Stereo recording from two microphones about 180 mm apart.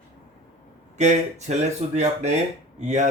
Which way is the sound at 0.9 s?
40° right (ahead or behind).